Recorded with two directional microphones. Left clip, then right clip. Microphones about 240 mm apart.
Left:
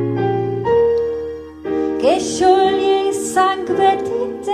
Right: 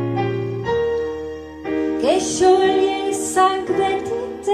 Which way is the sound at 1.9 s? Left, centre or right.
Left.